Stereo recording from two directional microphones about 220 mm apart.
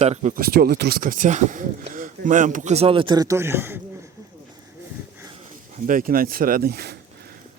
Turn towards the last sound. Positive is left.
turn(degrees=-45)  # may be behind; listen again after turning